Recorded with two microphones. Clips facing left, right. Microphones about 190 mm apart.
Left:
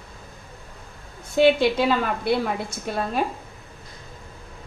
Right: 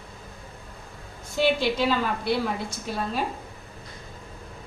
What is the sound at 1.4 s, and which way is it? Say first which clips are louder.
Speech: left 5 dB; 55° left (ahead or behind).